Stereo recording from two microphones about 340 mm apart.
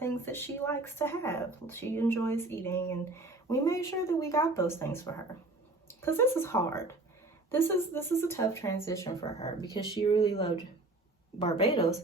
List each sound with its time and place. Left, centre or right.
0.0 s speech: centre